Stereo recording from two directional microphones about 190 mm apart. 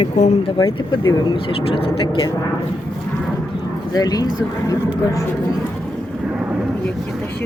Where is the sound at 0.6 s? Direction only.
25° left (ahead or behind).